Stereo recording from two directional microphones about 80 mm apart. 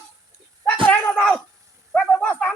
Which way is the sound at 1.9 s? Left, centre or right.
Centre.